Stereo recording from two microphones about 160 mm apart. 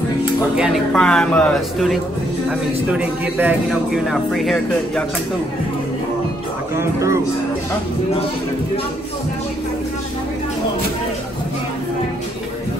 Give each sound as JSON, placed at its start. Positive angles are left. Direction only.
{"t": 0.6, "sound": "speech", "side_deg": 0}
{"t": 2.9, "sound": "speech", "side_deg": -10}
{"t": 4.1, "sound": "speech", "side_deg": 0}
{"t": 6.8, "sound": "speech", "side_deg": -15}